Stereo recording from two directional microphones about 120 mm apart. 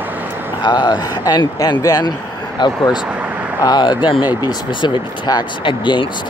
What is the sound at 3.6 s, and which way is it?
Speech, 35° left (ahead or behind).